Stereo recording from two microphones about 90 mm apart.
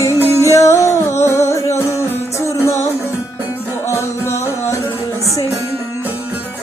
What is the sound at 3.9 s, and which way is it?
Music, 30° left (ahead or behind).